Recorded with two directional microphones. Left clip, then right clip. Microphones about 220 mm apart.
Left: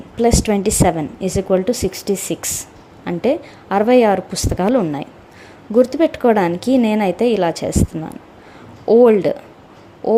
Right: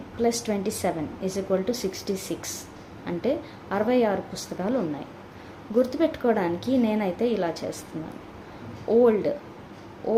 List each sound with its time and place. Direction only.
0.2 s a woman's voice: 40° left (ahead or behind)
8.9 s a woman's voice: 40° left (ahead or behind)